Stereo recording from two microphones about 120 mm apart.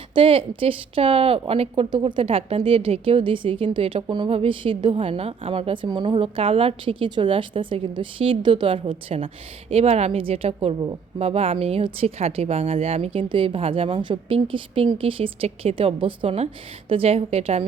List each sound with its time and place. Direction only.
0.1 s a woman's voice: 50° right (ahead or behind)
13.1 s speech: 45° right (ahead or behind)